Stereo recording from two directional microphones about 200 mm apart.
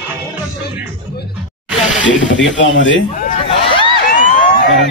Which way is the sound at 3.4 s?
25° left (ahead or behind).